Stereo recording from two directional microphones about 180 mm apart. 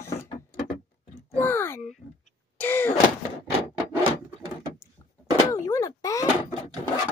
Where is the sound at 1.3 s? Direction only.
10° left (ahead or behind).